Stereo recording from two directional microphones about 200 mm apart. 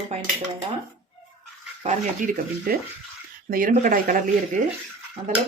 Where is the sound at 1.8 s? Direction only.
45° right (ahead or behind).